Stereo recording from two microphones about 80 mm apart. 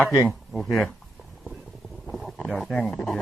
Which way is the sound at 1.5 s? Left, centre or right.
Centre.